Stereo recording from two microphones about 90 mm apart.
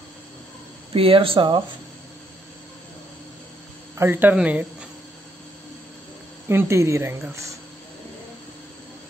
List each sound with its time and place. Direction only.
0.9 s speech: 85° right
4.0 s speech: 20° right (ahead or behind)
6.5 s speech: 30° right (ahead or behind)